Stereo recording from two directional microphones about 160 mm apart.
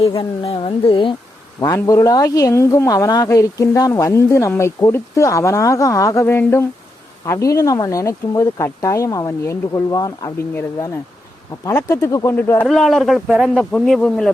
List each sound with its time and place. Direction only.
0.0 s speech: 35° left (ahead or behind)
1.6 s a woman's voice: 20° left (ahead or behind)
12.6 s speech: centre (ahead or behind)